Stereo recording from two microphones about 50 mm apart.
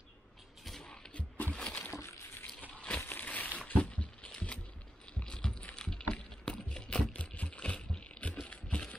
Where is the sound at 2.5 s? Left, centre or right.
Left.